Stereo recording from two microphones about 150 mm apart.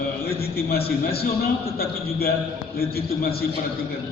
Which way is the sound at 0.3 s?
90° left.